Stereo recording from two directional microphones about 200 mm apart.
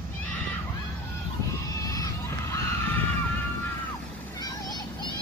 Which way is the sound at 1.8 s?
15° left (ahead or behind).